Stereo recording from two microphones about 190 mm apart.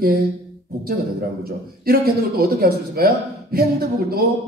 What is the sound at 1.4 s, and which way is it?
A man's voice, 50° right (ahead or behind).